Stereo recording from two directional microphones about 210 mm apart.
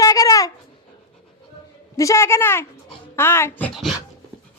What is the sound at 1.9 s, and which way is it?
A woman's voice, 15° left (ahead or behind).